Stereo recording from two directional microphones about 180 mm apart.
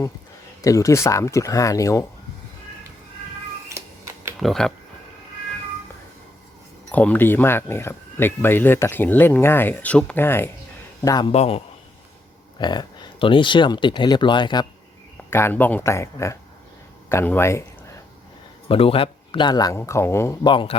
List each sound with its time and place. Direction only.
0.6 s speech: 20° left (ahead or behind)
3.7 s cat: 15° right (ahead or behind)
4.4 s speech: centre (ahead or behind)
6.9 s speech: 10° left (ahead or behind)
11.0 s a man's voice: 25° left (ahead or behind)
15.3 s speech: 15° left (ahead or behind)
18.7 s speech: 30° left (ahead or behind); by 20.5 s 15° left (ahead or behind)
20.5 s speech: 25° left (ahead or behind)